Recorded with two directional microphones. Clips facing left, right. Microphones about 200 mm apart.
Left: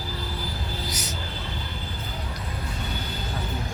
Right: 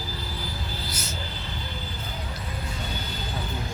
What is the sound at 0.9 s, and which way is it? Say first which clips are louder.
Music: left 2 dB; 15° left (ahead or behind).